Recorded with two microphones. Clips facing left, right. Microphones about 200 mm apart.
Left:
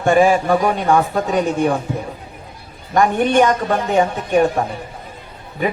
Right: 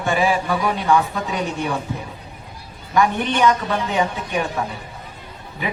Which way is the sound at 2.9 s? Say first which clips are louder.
Left 5 dB; 45° left (ahead or behind).